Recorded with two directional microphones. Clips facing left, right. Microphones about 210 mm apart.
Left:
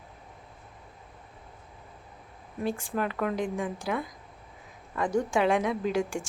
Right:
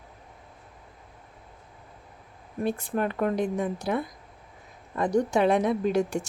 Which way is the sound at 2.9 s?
35° right (ahead or behind).